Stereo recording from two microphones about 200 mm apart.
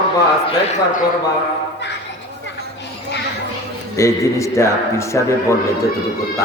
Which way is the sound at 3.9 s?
15° left (ahead or behind).